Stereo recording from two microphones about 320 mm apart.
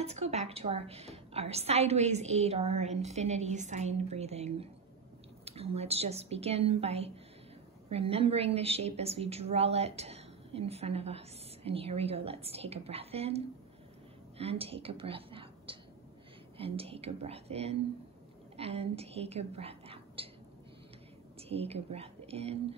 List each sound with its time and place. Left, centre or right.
0.0 s a woman's voice: centre
14.4 s speech: centre
21.4 s a woman's voice: centre